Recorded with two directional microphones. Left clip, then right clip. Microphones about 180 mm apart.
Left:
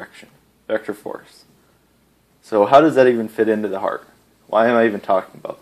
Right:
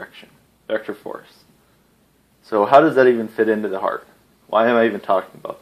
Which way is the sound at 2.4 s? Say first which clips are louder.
Left 1 dB; 30° left (ahead or behind).